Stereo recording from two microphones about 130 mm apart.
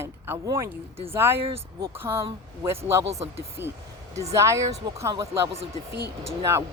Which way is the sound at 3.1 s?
55° right (ahead or behind).